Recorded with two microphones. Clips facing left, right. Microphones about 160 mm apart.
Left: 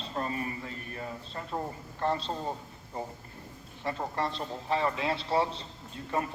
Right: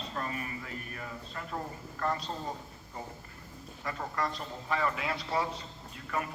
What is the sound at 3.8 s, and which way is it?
A man's voice, 30° left (ahead or behind).